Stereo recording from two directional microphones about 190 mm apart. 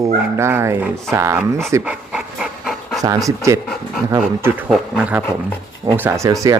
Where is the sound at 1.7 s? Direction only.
5° right (ahead or behind).